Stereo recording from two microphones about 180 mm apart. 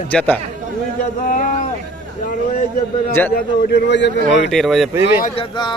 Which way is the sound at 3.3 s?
60° left (ahead or behind).